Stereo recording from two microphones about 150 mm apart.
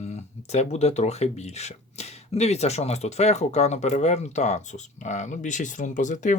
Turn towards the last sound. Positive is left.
turn(degrees=55)  # may be behind; listen again after turning